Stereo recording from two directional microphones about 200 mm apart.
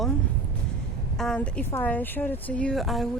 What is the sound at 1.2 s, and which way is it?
A woman's voice, 5° left (ahead or behind).